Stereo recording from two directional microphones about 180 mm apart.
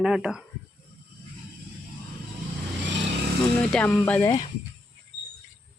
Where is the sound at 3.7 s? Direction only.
10° left (ahead or behind).